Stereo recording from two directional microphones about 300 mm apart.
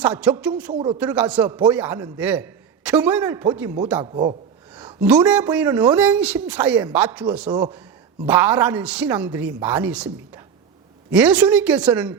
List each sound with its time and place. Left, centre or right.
0.0 s a man's voice: centre
0.7 s speech: centre
0.9 s a man's voice: centre
4.7 s a man's voice: centre